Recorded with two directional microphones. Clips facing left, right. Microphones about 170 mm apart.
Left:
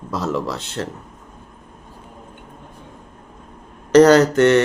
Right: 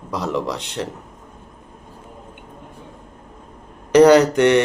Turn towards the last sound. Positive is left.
turn(degrees=-15)  # may be behind; listen again after turning